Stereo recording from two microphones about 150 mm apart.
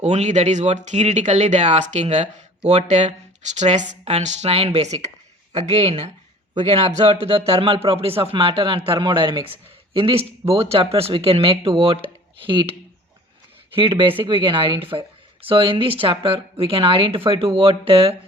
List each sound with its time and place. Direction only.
0.0 s speech: 50° right (ahead or behind)
13.7 s speech: 35° right (ahead or behind)